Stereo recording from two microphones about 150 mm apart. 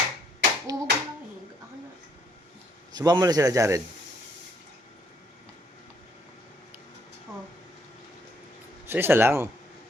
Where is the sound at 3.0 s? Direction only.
25° right (ahead or behind).